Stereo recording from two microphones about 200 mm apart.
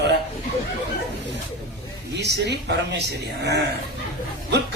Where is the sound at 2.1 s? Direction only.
55° right (ahead or behind).